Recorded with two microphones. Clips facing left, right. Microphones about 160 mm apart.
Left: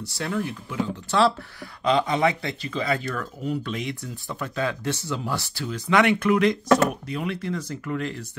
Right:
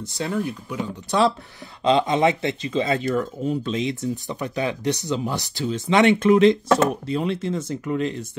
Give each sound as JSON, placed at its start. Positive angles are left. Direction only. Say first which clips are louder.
{"t": 0.0, "sound": "speech", "louder": "right 2 dB", "side_deg": -20}